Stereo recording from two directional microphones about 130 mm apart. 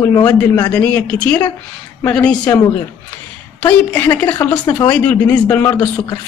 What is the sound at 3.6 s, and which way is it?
A man's voice, 15° left (ahead or behind).